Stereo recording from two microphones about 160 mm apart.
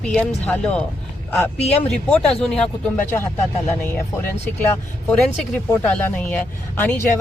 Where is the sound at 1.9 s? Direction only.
5° left (ahead or behind).